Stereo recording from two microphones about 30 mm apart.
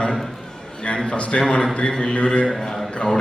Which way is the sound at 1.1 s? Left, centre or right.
Left.